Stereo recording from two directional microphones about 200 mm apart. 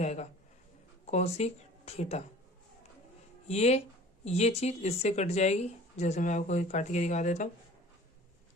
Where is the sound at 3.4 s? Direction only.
35° left (ahead or behind).